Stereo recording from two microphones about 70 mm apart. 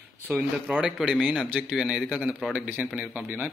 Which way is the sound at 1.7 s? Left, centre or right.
Centre.